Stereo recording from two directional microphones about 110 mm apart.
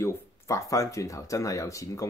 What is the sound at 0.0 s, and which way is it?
Speech, 30° left (ahead or behind).